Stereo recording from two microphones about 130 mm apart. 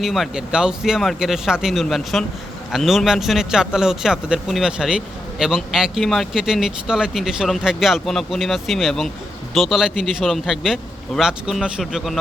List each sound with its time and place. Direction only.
0.0 s speech: centre (ahead or behind)